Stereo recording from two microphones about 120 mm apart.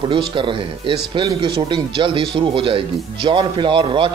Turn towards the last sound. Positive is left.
turn(degrees=-45)  # may be behind; listen again after turning